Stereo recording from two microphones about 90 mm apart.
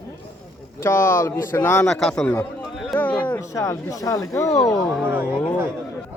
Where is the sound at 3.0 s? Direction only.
15° left (ahead or behind).